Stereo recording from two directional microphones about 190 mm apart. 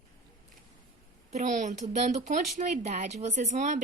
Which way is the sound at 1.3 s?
40° right (ahead or behind).